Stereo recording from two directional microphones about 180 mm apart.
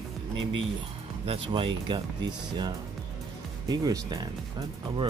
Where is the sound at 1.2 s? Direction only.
30° right (ahead or behind).